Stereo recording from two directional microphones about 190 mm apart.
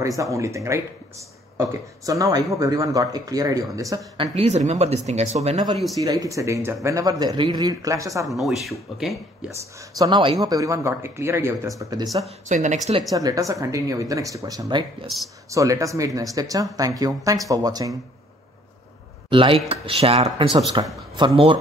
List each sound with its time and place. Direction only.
0.2 s speech: 15° right (ahead or behind)
4.4 s speech: 35° right (ahead or behind)
6.0 s speech: 15° right (ahead or behind)
8.3 s speech: centre (ahead or behind)
9.8 s speech: 20° right (ahead or behind)
12.3 s speech: 40° right (ahead or behind)
13.1 s speech: 20° right (ahead or behind)
15.1 s speech: centre (ahead or behind)
15.5 s speech: 15° right (ahead or behind)
19.2 s speech: 25° right (ahead or behind)